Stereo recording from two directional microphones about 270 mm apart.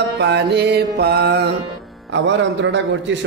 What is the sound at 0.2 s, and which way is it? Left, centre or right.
Mantra, right.